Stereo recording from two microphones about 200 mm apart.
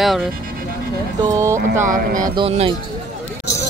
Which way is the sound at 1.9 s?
40° right (ahead or behind).